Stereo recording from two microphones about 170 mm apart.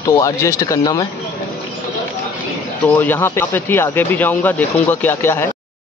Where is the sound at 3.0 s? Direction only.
10° left (ahead or behind).